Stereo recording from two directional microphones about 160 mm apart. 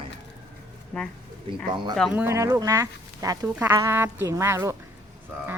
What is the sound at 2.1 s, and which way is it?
Speech, 15° right (ahead or behind).